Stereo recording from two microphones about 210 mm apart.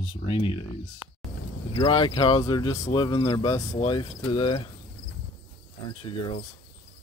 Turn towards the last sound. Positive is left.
turn(degrees=25)  # may be behind; listen again after turning